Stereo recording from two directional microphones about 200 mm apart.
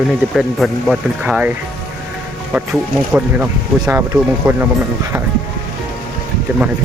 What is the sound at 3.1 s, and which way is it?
Speech, 10° right (ahead or behind).